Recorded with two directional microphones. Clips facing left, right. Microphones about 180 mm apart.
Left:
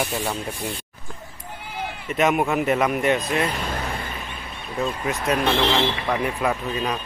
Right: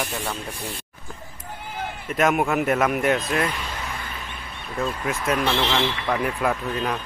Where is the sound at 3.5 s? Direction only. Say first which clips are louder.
Left 5 dB; 50° left (ahead or behind).